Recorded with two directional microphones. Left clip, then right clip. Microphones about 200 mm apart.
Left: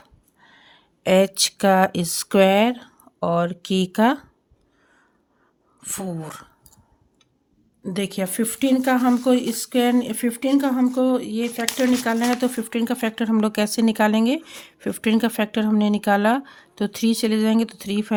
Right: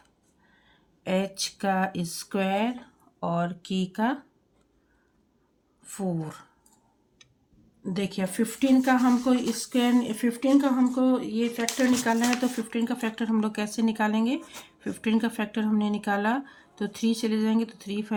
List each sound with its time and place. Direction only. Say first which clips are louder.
0.4 s speech: left 11 dB; 55° left (ahead or behind)
5.8 s speech: left 2 dB; 55° left (ahead or behind)
7.9 s speech: left 5 dB; 50° left (ahead or behind)